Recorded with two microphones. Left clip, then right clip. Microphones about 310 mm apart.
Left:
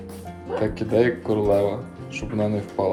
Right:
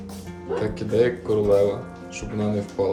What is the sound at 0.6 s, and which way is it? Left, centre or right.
Speech, centre.